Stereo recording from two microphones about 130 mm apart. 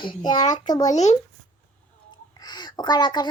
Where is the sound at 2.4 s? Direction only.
35° left (ahead or behind).